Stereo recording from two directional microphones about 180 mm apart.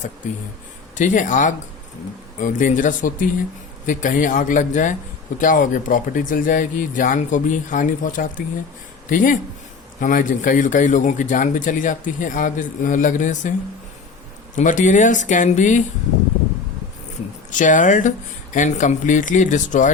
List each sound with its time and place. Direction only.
0.9 s a man's voice: 45° left (ahead or behind)
14.5 s a man's voice: 45° left (ahead or behind)
17.5 s a man's voice: 45° left (ahead or behind)